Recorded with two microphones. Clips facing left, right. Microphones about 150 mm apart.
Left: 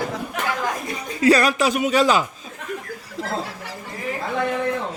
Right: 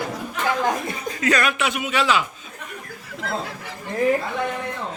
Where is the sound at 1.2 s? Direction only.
35° left (ahead or behind).